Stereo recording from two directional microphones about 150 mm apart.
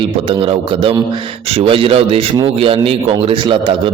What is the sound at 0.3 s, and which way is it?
A man's voice, 35° right (ahead or behind).